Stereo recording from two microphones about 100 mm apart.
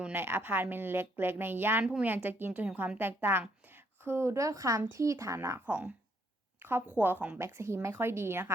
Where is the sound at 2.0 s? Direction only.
20° right (ahead or behind).